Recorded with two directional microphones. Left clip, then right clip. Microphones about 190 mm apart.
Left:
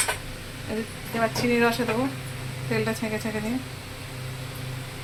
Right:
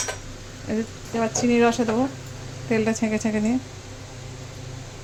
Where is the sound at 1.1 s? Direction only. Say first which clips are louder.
Right 2 dB; 50° right (ahead or behind).